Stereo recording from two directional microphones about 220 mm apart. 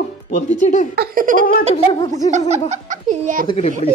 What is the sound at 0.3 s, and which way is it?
Speech, 35° left (ahead or behind).